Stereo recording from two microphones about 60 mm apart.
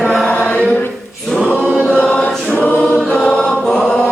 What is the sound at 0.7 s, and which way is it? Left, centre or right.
A capella, left.